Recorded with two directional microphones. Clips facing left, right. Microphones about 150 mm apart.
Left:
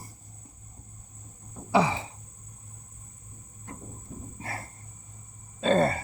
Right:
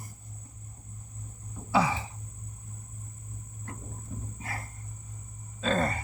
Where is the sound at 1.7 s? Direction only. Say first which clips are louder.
Left 2 dB; 25° left (ahead or behind).